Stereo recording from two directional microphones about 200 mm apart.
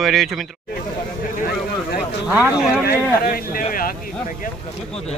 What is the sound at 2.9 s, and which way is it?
Speech, 45° left (ahead or behind).